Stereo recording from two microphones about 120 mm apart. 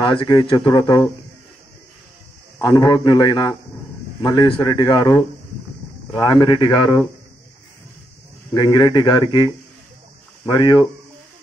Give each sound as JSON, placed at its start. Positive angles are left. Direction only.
{"t": 0.0, "sound": "speech", "side_deg": 40}
{"t": 2.6, "sound": "speech", "side_deg": 35}
{"t": 8.5, "sound": "speech", "side_deg": 35}